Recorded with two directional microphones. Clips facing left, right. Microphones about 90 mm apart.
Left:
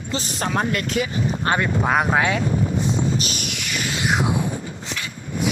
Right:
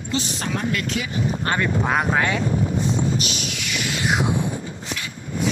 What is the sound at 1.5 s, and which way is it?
Speech, 20° left (ahead or behind).